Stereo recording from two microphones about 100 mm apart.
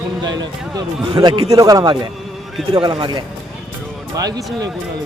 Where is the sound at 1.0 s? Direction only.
50° right (ahead or behind).